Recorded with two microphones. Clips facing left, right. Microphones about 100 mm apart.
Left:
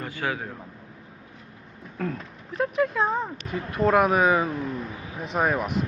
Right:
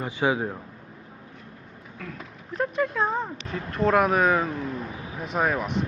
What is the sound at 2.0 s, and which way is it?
Speech, 45° left (ahead or behind).